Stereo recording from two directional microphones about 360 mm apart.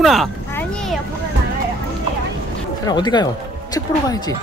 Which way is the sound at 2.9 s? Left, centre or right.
Centre.